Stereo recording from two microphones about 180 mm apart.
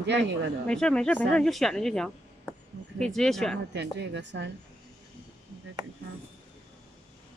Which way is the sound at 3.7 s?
75° right (ahead or behind).